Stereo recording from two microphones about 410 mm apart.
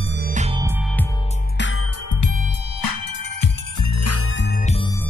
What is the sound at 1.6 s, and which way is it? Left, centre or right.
Music, left.